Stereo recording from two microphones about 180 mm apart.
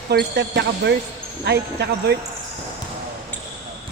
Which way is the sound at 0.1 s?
65° right (ahead or behind).